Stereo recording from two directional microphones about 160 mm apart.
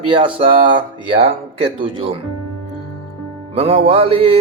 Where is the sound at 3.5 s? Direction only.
40° right (ahead or behind).